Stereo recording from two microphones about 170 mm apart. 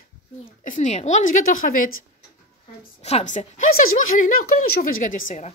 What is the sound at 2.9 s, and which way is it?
Speech, 40° left (ahead or behind).